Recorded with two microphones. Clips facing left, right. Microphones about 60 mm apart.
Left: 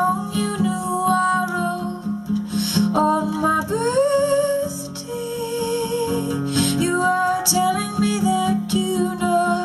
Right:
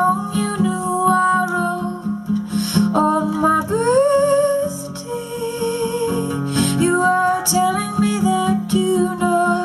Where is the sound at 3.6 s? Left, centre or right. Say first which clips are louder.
Right 4 dB; centre.